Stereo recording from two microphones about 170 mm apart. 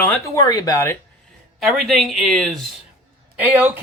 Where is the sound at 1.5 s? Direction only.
Centre (ahead or behind).